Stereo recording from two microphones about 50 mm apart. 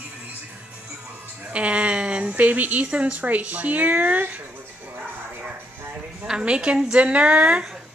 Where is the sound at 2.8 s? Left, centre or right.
Right.